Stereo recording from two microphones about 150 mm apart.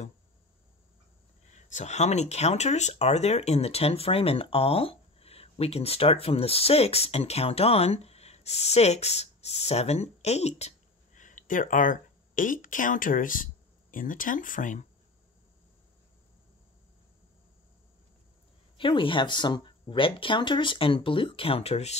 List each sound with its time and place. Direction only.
1.5 s speech: 50° left (ahead or behind)
11.1 s speech: 55° left (ahead or behind)
18.8 s speech: 35° left (ahead or behind)